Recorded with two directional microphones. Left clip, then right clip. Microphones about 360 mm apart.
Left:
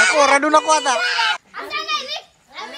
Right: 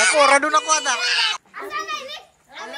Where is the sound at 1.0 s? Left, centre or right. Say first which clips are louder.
Left 2 dB; left.